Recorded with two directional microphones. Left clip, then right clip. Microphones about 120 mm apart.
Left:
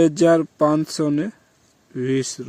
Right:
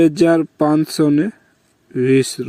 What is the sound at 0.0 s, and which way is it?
Speech, 25° right (ahead or behind).